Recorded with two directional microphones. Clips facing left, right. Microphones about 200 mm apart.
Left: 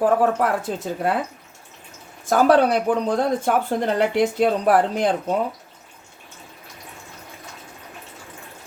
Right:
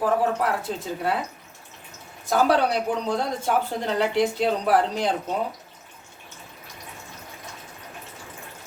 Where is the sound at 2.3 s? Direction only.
50° left (ahead or behind).